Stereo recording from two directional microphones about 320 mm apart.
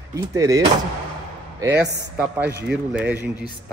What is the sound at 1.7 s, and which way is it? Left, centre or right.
Speech, right.